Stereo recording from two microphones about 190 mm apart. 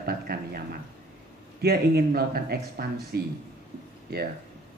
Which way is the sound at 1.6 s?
55° right (ahead or behind).